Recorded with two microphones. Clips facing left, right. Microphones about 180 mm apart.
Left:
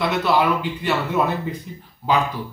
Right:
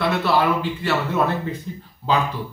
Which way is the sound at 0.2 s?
15° left (ahead or behind).